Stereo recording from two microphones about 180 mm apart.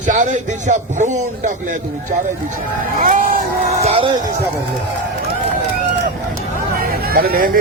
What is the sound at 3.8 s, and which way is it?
Music, 35° right (ahead or behind).